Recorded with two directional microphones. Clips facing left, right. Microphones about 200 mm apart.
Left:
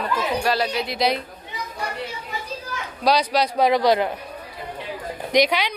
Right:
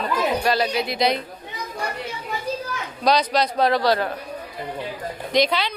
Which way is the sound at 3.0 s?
10° left (ahead or behind).